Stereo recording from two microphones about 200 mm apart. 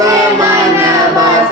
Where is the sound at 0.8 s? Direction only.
15° right (ahead or behind).